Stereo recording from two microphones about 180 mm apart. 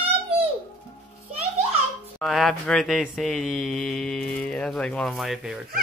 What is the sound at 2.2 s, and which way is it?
Speech, centre (ahead or behind).